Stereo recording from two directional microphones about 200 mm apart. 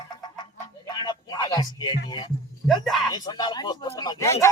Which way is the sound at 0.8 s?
20° left (ahead or behind).